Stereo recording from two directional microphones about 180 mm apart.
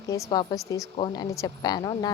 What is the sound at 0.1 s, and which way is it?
Speech, 20° left (ahead or behind).